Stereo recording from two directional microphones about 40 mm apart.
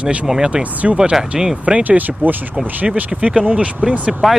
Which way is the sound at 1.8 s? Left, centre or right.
Right.